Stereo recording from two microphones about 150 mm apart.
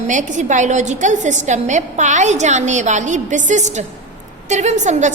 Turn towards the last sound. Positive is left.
turn(degrees=-50)  # may be behind; listen again after turning